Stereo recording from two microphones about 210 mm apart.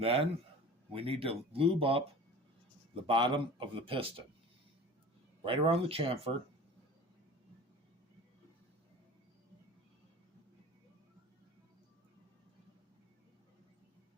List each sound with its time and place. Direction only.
0.0 s speech: 25° right (ahead or behind)
5.5 s speech: 25° right (ahead or behind)